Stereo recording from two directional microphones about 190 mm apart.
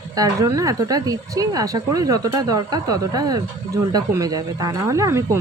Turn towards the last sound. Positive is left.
turn(degrees=-15)  # may be behind; listen again after turning